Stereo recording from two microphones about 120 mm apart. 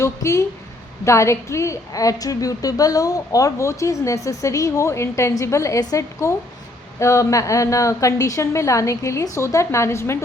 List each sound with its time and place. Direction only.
0.0 s a woman's voice: 25° left (ahead or behind)